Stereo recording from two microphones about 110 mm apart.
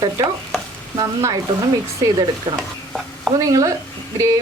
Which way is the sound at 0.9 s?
30° right (ahead or behind).